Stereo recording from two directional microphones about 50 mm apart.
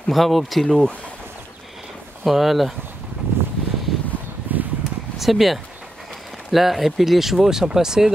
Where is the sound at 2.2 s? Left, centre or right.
Centre.